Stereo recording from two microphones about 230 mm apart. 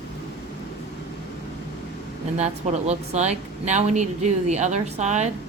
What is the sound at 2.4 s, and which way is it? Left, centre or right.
Speech, right.